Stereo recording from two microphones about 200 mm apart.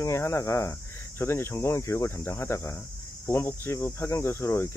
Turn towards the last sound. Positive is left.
turn(degrees=10)  # may be behind; listen again after turning